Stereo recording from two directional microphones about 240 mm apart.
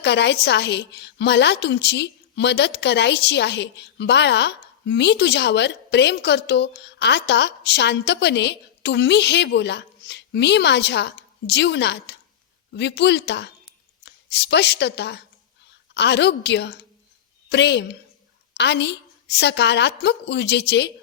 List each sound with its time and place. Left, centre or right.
0.0 s a woman's voice: left